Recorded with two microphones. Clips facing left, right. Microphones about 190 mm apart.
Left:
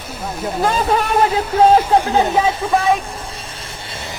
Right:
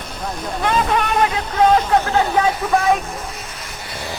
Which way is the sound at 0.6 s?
35° left (ahead or behind).